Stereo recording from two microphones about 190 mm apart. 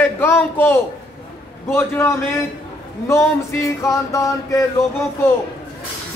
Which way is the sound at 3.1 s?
15° left (ahead or behind).